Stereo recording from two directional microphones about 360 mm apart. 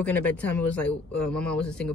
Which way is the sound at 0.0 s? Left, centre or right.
Centre.